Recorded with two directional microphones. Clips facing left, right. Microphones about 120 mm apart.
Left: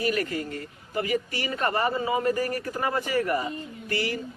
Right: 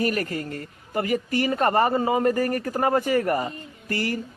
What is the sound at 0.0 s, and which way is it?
Speech, 45° right (ahead or behind).